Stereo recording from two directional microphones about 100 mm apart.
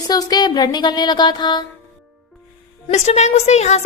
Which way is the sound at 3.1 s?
90° left.